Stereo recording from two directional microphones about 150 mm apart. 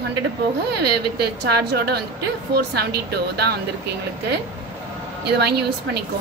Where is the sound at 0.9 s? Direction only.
90° right.